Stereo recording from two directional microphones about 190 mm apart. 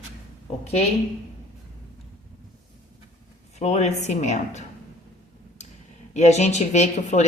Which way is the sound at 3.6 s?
35° left (ahead or behind).